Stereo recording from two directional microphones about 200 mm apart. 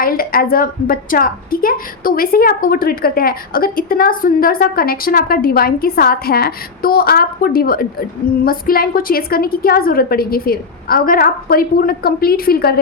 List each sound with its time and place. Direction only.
0.0 s a woman's voice: 45° left (ahead or behind)